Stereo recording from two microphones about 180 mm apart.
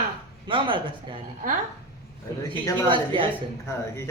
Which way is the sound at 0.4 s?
30° right (ahead or behind).